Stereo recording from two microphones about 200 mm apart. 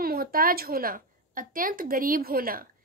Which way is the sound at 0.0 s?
45° right (ahead or behind).